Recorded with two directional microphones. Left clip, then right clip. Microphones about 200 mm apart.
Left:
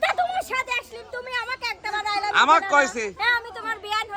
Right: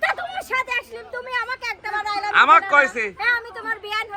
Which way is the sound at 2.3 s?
10° left (ahead or behind).